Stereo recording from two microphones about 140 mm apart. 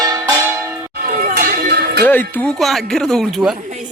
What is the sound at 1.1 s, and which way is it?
Music, 90° right.